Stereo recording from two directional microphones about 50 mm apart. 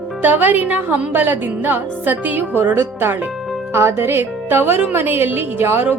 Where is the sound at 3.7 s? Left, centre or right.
Right.